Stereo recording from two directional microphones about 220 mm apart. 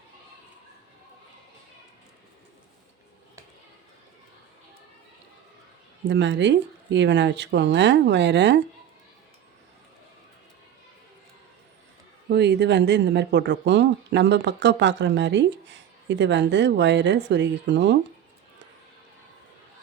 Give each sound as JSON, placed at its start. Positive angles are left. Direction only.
{"t": 6.1, "sound": "speech", "side_deg": -55}
{"t": 12.3, "sound": "speech", "side_deg": -50}